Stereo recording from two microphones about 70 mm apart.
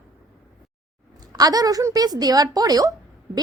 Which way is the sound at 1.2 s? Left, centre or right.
Right.